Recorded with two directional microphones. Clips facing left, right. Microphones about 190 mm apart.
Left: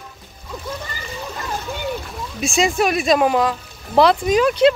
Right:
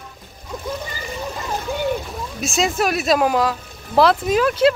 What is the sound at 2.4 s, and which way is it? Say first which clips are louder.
Speech: left 2 dB; centre (ahead or behind).